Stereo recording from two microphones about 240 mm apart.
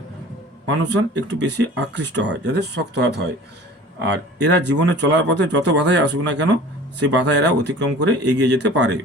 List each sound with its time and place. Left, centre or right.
0.7 s speech: right